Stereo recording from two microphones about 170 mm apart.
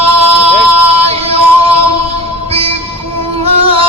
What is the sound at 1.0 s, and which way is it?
Music, 35° right (ahead or behind).